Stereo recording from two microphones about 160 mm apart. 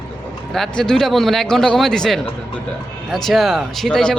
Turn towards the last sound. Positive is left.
turn(degrees=0)  # may be behind; listen again after turning